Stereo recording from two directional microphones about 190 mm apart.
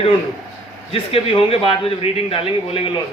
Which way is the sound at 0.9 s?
30° left (ahead or behind).